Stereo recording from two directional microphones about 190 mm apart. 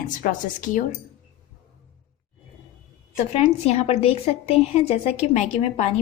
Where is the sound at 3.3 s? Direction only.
35° left (ahead or behind).